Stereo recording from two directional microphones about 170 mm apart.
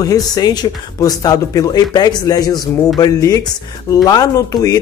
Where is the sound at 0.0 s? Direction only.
20° left (ahead or behind).